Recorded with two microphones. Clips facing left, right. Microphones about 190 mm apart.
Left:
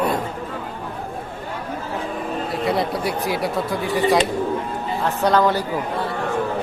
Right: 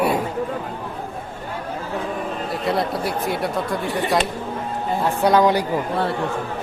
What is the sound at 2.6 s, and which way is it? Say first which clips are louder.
Speech: even; centre (ahead or behind).